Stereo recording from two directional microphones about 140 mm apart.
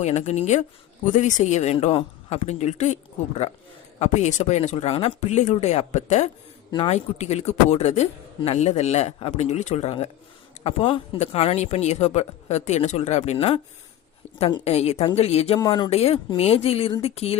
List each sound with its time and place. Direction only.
0.0 s speech: 55° left (ahead or behind)
10.6 s speech: 45° left (ahead or behind)
14.6 s speech: 50° left (ahead or behind)
15.5 s speech: 30° left (ahead or behind)
15.9 s speech: 45° left (ahead or behind)